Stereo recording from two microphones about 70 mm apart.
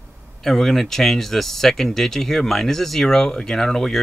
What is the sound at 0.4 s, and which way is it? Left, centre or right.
Speech, centre.